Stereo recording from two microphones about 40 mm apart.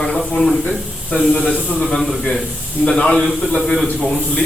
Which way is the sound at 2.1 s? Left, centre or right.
Centre.